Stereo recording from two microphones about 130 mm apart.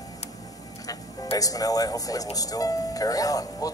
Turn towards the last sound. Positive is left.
turn(degrees=25)  # may be behind; listen again after turning